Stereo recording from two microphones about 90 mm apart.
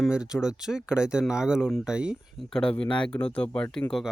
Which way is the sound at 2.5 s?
10° left (ahead or behind).